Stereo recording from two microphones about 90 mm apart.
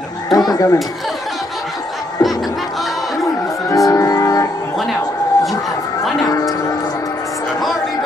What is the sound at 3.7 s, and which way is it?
Music, 40° left (ahead or behind).